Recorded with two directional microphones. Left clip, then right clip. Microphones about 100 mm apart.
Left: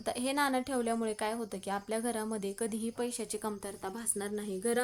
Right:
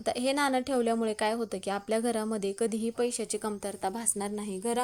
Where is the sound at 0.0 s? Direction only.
35° right (ahead or behind).